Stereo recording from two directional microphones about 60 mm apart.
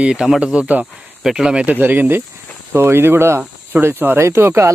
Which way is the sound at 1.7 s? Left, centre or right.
Right.